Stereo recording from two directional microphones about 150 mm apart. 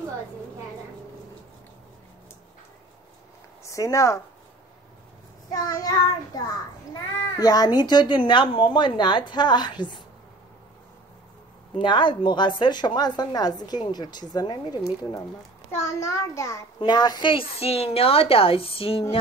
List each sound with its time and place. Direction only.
3.6 s speech: 20° left (ahead or behind)
5.5 s a woman's voice: 25° left (ahead or behind)
11.8 s a woman's voice: 30° left (ahead or behind)